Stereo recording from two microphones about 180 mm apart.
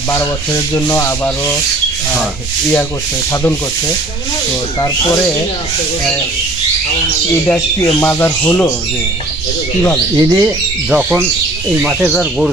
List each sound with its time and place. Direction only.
0.7 s sanding: 15° left (ahead or behind)
8.0 s sanding: 10° left (ahead or behind)
10.2 s speech: 10° right (ahead or behind)